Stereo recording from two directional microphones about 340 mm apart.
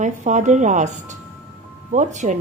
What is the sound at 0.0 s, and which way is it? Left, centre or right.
A woman's voice, right.